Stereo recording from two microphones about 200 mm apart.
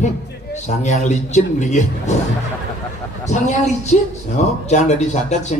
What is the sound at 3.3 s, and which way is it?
Speech, 35° left (ahead or behind).